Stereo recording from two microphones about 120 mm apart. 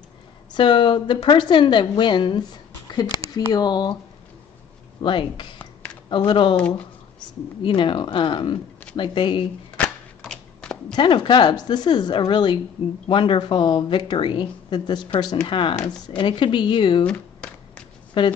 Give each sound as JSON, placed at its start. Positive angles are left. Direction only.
{"t": 0.5, "sound": "a woman's voice", "side_deg": 40}
{"t": 5.0, "sound": "a woman's voice", "side_deg": 45}
{"t": 6.5, "sound": "speech", "side_deg": 10}
{"t": 7.2, "sound": "speech", "side_deg": 45}
{"t": 9.8, "sound": "a sound", "side_deg": 5}
{"t": 10.9, "sound": "a woman's voice", "side_deg": 40}
{"t": 17.0, "sound": "a sound", "side_deg": 10}
{"t": 18.2, "sound": "speech", "side_deg": 45}